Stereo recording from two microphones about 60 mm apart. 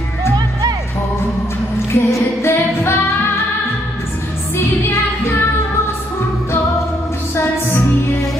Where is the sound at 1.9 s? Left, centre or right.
Left.